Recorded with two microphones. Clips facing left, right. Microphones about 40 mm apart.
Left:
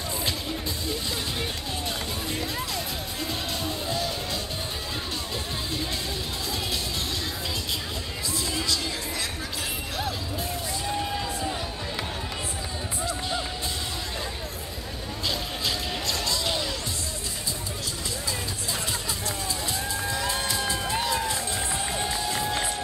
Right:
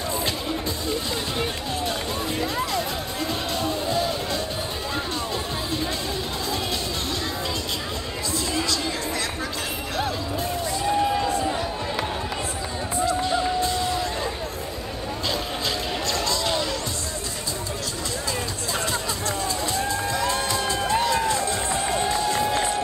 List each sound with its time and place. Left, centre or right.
2.3 s music: centre
16.1 s music: centre
20.3 s crowd: centre
21.5 s run: centre
21.8 s music: centre